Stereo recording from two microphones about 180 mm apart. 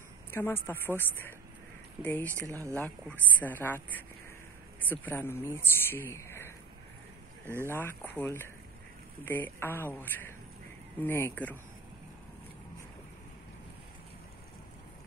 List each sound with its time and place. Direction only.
0.3 s a man's voice: 10° left (ahead or behind)
2.5 s speech: 15° right (ahead or behind)
2.8 s a man's voice: 10° left (ahead or behind)
7.7 s a man's voice: 10° left (ahead or behind)